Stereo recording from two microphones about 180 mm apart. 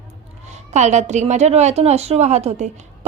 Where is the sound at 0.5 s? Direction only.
40° right (ahead or behind).